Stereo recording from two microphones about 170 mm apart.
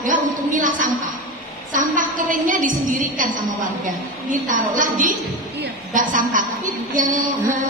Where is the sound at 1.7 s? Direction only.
50° right (ahead or behind).